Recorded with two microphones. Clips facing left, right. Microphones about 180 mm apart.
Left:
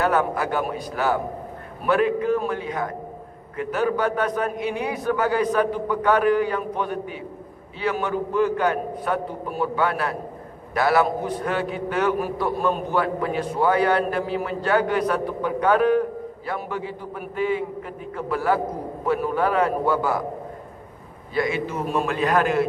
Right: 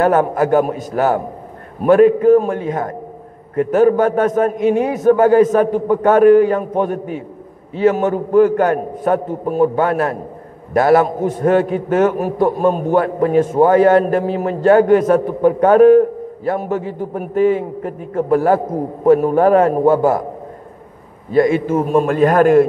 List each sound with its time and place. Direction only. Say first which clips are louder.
0.0 s a man's voice: right 8 dB; 45° right (ahead or behind)
21.3 s a man's voice: right 11 dB; 45° right (ahead or behind)